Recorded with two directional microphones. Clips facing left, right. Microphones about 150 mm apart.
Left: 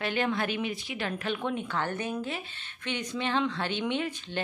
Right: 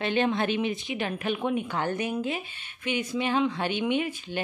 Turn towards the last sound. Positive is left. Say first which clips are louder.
# right 4 dB
turn(degrees=-10)  # may be behind; listen again after turning